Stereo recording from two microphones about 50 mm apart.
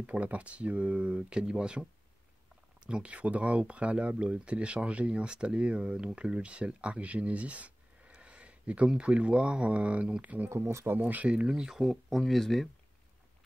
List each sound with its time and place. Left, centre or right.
0.0 s speech: right
2.9 s speech: right
10.5 s speech: right
11.0 s speech: right
11.2 s speech: right
11.8 s speech: centre